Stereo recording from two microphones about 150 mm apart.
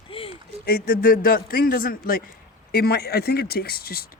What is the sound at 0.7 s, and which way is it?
Speech, 70° left (ahead or behind).